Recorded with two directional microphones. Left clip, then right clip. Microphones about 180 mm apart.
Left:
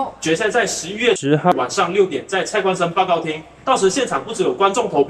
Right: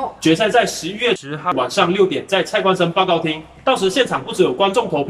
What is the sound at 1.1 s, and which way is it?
Speech, 40° left (ahead or behind).